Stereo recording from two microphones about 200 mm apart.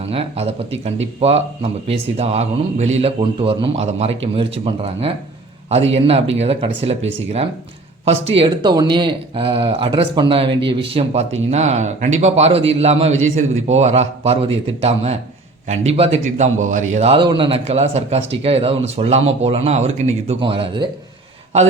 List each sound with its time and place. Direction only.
0.1 s speech: 30° right (ahead or behind)
8.0 s speech: 30° right (ahead or behind)